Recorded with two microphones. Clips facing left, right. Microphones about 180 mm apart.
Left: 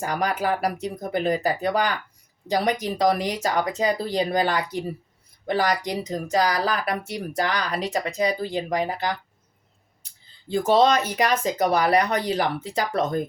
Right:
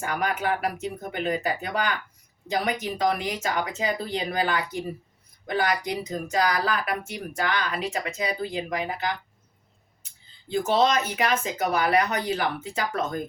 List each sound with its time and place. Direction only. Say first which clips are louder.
0.0 s speech: left 2 dB; 35° left (ahead or behind)
10.7 s speech: left 4 dB; 35° left (ahead or behind)